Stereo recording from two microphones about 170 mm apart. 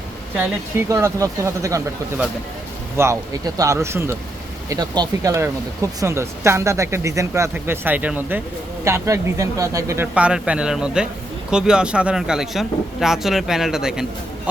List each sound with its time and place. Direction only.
0.3 s speech: 15° right (ahead or behind)